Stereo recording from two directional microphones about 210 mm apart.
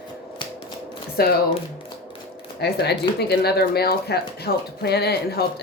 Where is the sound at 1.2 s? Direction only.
45° left (ahead or behind).